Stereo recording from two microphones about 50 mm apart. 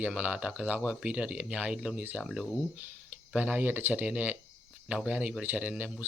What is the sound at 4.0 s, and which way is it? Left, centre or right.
Speech, right.